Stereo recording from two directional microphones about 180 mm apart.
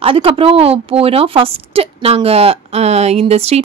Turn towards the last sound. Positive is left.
turn(degrees=-35)  # may be behind; listen again after turning